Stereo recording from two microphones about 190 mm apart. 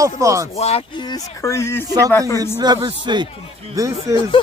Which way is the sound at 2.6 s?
20° right (ahead or behind).